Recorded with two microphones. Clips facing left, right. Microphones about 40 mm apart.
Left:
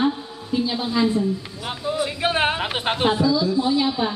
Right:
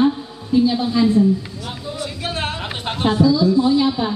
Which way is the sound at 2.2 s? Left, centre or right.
Left.